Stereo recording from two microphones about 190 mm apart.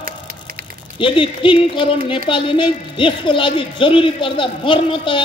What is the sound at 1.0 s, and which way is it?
A woman's voice, 25° left (ahead or behind).